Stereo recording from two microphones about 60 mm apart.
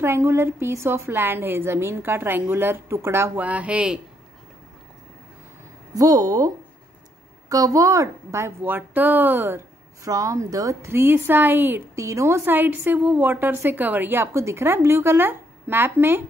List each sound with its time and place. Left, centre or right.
0.0 s a woman's voice: right
3.3 s speech: right
5.9 s a woman's voice: right
8.6 s a woman's voice: right
10.0 s speech: right
10.9 s a woman's voice: right
11.9 s a woman's voice: right
12.4 s a woman's voice: right